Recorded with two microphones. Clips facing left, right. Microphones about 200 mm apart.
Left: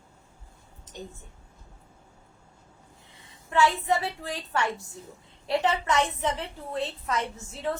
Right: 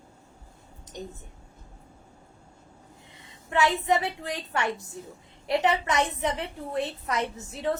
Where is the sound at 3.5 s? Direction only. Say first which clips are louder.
Even; 20° right (ahead or behind).